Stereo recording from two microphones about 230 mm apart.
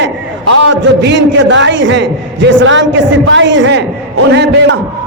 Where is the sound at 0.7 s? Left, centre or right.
Right.